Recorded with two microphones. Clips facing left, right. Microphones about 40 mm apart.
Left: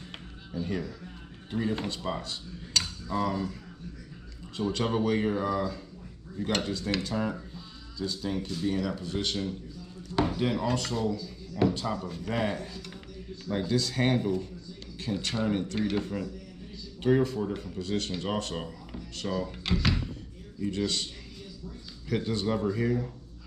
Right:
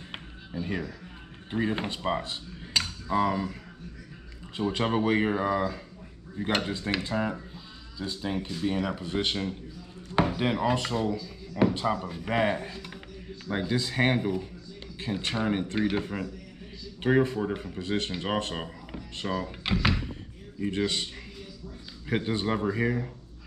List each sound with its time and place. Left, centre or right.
0.5 s speech: right
1.5 s cutlery: right
4.6 s speech: right
20.6 s speech: right
22.1 s speech: right